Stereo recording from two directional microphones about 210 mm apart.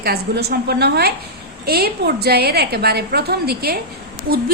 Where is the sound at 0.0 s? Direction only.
50° right (ahead or behind).